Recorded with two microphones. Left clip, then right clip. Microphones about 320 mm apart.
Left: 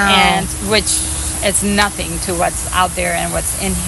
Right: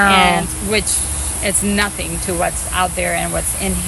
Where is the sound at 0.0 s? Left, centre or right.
Centre.